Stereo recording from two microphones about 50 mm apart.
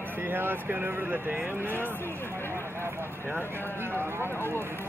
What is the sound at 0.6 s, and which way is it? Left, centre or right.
Speech, right.